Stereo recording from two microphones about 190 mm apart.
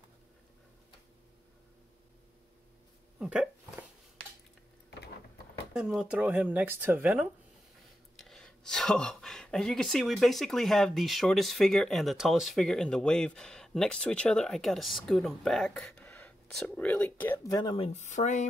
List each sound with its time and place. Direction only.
3.2 s speech: 5° right (ahead or behind)
5.7 s speech: 5° right (ahead or behind)
8.2 s speech: centre (ahead or behind)
17.6 s speech: 25° left (ahead or behind)